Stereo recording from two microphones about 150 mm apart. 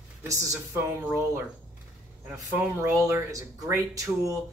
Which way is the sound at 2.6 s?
20° right (ahead or behind).